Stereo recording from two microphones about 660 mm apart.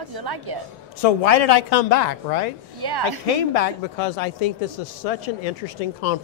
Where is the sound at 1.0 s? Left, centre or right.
Left.